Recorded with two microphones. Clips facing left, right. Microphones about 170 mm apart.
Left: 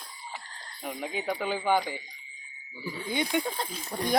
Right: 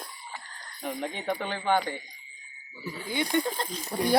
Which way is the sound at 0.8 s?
5° left (ahead or behind).